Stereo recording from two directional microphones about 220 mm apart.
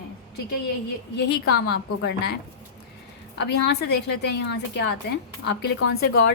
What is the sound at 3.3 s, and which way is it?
A woman's voice, 50° left (ahead or behind).